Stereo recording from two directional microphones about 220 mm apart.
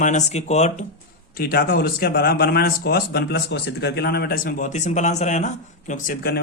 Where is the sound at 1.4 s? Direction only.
40° left (ahead or behind).